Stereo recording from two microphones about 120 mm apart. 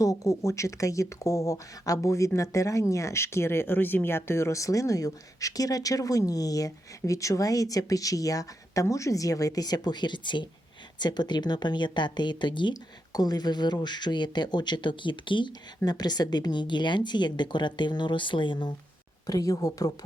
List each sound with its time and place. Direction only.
0.0 s speech: 30° left (ahead or behind)
19.3 s speech: 30° left (ahead or behind)